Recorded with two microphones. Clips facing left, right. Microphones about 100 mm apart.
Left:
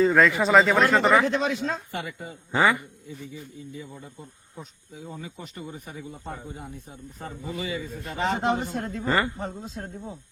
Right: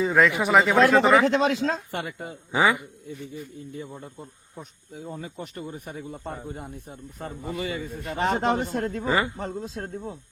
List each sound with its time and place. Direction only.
0.0 s a man's voice: 5° right (ahead or behind)
1.2 s speech: 90° right
1.9 s speech: 50° right (ahead or behind)
2.5 s a man's voice: 10° right (ahead or behind)
3.7 s speech: 55° right (ahead or behind)
9.0 s a man's voice: 10° right (ahead or behind)